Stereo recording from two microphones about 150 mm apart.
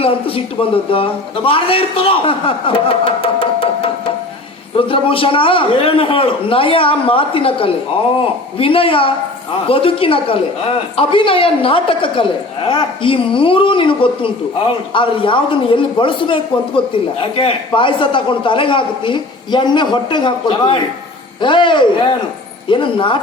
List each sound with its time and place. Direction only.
0.0 s a man's voice: 40° left (ahead or behind)